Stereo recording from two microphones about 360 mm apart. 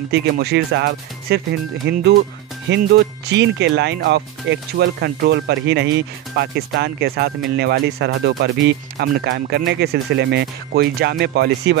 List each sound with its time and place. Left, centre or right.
0.1 s speech: right